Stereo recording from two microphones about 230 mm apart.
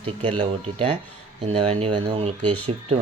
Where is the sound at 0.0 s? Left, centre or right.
Right.